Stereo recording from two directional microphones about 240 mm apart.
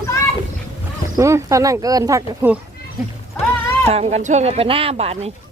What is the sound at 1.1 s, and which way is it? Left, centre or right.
Speech, centre.